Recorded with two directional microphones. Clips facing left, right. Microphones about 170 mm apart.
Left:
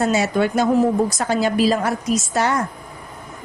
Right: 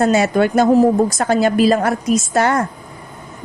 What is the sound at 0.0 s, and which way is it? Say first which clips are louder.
A woman's voice: right 4 dB; 55° right (ahead or behind).